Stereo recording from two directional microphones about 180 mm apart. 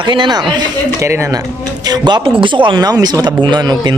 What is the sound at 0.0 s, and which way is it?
Speech, 25° right (ahead or behind).